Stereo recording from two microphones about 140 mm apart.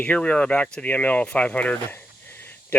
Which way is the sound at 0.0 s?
10° left (ahead or behind).